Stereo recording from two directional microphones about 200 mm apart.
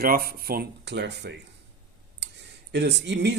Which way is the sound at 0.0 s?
50° right (ahead or behind).